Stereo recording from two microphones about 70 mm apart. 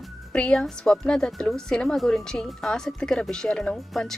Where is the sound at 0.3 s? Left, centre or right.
Centre.